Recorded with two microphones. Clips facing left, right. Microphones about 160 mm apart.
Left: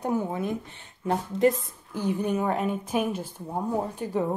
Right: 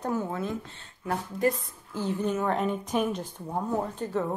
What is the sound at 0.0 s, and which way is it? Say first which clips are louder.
A woman's voice: left 2 dB; 15° left (ahead or behind).